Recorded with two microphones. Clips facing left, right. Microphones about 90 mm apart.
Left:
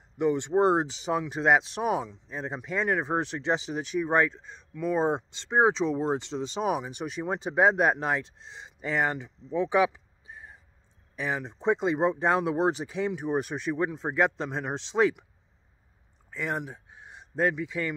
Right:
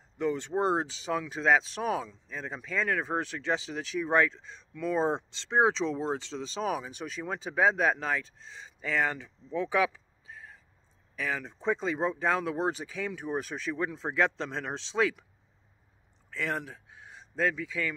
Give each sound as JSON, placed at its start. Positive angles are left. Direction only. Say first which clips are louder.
{"t": 0.2, "sound": "speech", "louder": "left 5 dB", "side_deg": 20}
{"t": 8.7, "sound": "a sound", "louder": "left 2 dB", "side_deg": 20}
{"t": 11.1, "sound": "speech", "louder": "left 2 dB", "side_deg": 20}
{"t": 16.3, "sound": "speech", "louder": "left 1 dB", "side_deg": 15}